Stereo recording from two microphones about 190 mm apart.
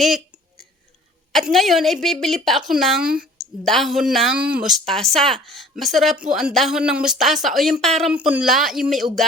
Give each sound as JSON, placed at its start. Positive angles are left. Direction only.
{"t": 1.3, "sound": "a woman's voice", "side_deg": 0}